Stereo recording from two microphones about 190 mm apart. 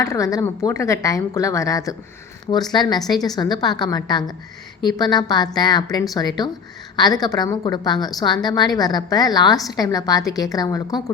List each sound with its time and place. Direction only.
0.0 s a woman's voice: 15° left (ahead or behind)